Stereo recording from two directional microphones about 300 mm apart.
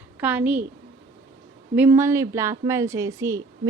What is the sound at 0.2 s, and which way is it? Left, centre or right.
Speech, centre.